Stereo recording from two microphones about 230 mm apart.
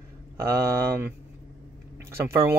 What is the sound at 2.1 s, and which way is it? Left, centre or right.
Speech, centre.